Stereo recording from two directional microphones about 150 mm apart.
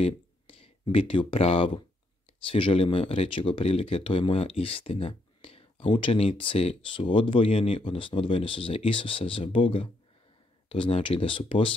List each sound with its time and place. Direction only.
0.0 s speech: 40° left (ahead or behind)